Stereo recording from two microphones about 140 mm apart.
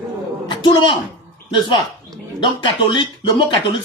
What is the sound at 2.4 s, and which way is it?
Speech, 35° left (ahead or behind).